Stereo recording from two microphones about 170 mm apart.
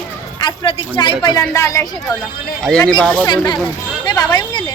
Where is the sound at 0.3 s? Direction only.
30° left (ahead or behind).